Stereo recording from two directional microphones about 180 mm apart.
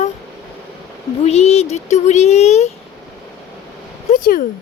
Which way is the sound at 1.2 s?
35° left (ahead or behind).